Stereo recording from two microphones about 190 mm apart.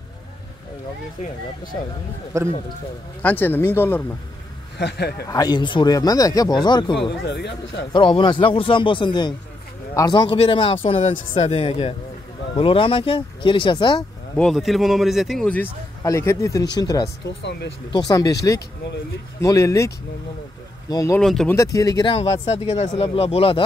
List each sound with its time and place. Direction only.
2.3 s speech: 15° right (ahead or behind)
3.2 s speech: 10° left (ahead or behind)
4.7 s speech: 60° left (ahead or behind)
5.2 s speech: 20° left (ahead or behind)
7.2 s speech: 65° left (ahead or behind)
7.9 s speech: 25° left (ahead or behind)
14.3 s a man's voice: centre (ahead or behind); by 17.1 s 20° left (ahead or behind)
17.4 s speech: 65° left (ahead or behind)
17.9 s speech: 20° left (ahead or behind)
20.9 s speech: 15° left (ahead or behind)
21.2 s a man's voice: centre (ahead or behind)
21.5 s speech: 20° left (ahead or behind)
22.1 s speech: 35° left (ahead or behind)